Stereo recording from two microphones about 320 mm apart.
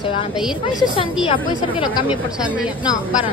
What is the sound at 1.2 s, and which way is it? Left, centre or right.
Speech, centre.